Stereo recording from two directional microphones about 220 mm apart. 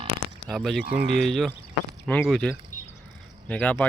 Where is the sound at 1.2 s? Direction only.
Centre (ahead or behind).